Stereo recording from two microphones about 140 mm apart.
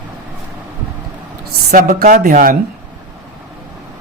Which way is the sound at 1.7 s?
80° right.